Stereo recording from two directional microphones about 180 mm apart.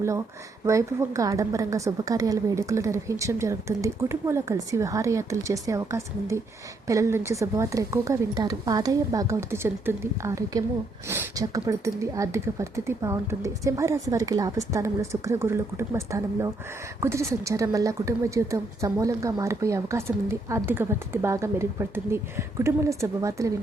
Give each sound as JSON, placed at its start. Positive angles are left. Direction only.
{"t": 0.6, "sound": "a woman's voice", "side_deg": -15}